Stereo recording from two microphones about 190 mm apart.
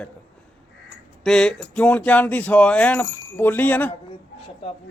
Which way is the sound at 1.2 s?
5° left (ahead or behind).